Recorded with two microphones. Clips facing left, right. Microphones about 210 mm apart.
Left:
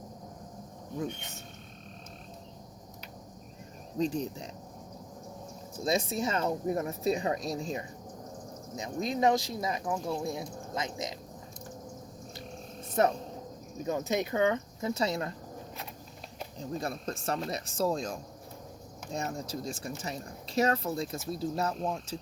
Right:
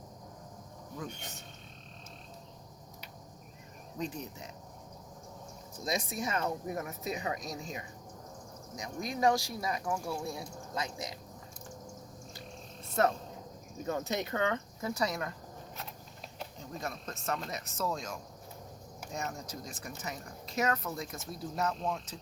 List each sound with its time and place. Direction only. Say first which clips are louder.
3.9 s speech: left 8 dB; 30° left (ahead or behind)
5.8 s speech: left 5 dB; 25° left (ahead or behind)
13.8 s speech: left 4 dB; 15° left (ahead or behind)
16.6 s speech: left 6 dB; 30° left (ahead or behind)